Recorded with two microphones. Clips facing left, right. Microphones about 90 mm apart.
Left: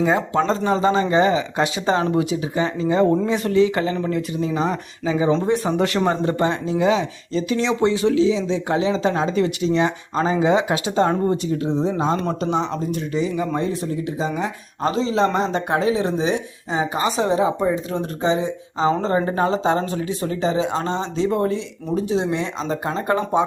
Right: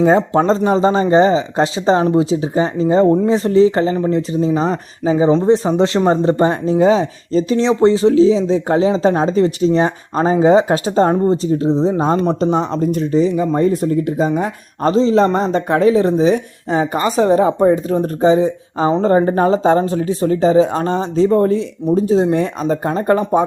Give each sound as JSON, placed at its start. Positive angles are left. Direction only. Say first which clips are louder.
{"t": 0.2, "sound": "speech", "louder": "right 6 dB", "side_deg": -20}
{"t": 12.1, "sound": "speech", "louder": "right 7 dB", "side_deg": -20}
{"t": 12.4, "sound": "speech", "louder": "right 6 dB", "side_deg": -40}
{"t": 13.6, "sound": "speech", "louder": "right 9 dB", "side_deg": -45}
{"t": 20.7, "sound": "speech", "louder": "right 5 dB", "side_deg": 25}
{"t": 21.0, "sound": "speech", "louder": "right 9 dB", "side_deg": -35}